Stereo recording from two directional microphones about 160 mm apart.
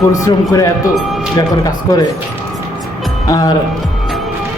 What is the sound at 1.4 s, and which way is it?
Speech, 25° left (ahead or behind).